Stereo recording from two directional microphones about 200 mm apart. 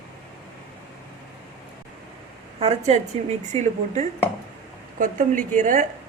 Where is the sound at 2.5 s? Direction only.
30° right (ahead or behind).